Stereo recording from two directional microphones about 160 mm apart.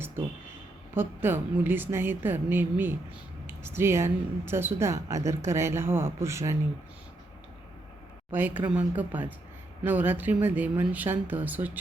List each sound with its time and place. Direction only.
0.9 s speech: 15° right (ahead or behind)
8.3 s speech: 10° right (ahead or behind)